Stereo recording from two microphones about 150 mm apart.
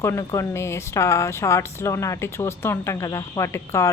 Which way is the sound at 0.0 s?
20° left (ahead or behind).